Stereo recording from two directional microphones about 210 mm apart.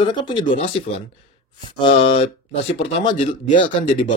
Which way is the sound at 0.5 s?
40° left (ahead or behind).